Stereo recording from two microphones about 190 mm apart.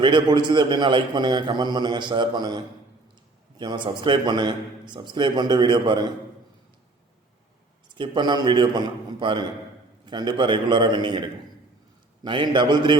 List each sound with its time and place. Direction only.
0.0 s a man's voice: 25° right (ahead or behind)
7.9 s a man's voice: 25° right (ahead or behind)